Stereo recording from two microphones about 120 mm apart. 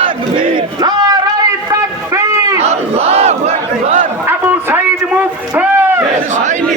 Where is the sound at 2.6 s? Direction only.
60° right (ahead or behind).